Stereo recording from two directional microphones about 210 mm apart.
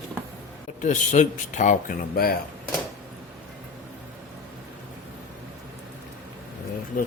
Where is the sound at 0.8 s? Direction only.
35° left (ahead or behind).